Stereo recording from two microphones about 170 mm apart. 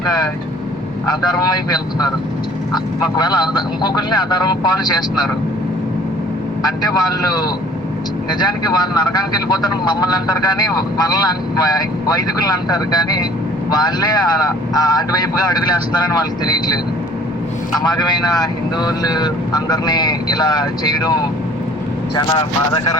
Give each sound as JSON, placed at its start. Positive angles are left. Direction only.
{"t": 1.0, "sound": "speech", "side_deg": 25}
{"t": 6.6, "sound": "speech", "side_deg": 25}
{"t": 22.3, "sound": "speech", "side_deg": 25}